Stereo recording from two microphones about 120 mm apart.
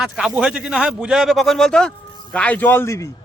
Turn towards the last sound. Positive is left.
turn(degrees=25)  # may be behind; listen again after turning